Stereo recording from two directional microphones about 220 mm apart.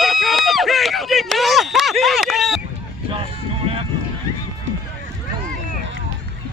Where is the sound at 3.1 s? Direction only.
25° right (ahead or behind).